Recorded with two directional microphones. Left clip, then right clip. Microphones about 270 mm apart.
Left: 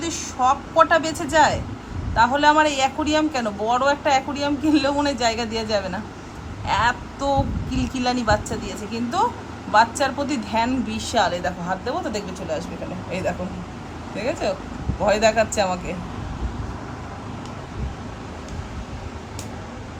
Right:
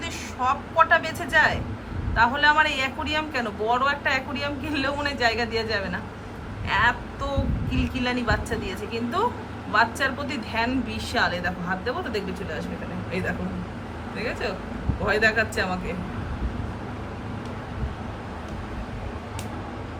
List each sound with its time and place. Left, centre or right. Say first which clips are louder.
0.0 s a woman's voice: left 5 dB; centre
14.2 s a woman's voice: left 5 dB; centre